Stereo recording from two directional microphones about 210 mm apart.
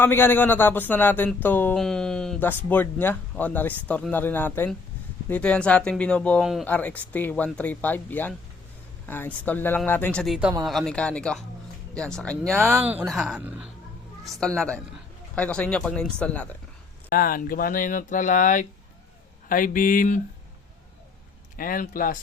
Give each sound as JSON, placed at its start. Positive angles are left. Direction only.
{"t": 0.0, "sound": "speech", "side_deg": 10}
{"t": 17.1, "sound": "speech", "side_deg": 40}
{"t": 21.5, "sound": "speech", "side_deg": 40}